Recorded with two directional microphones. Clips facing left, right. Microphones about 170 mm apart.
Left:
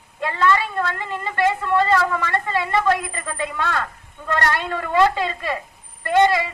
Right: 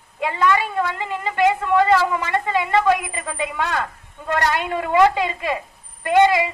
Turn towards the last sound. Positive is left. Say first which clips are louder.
# right 2 dB
turn(degrees=-15)  # may be behind; listen again after turning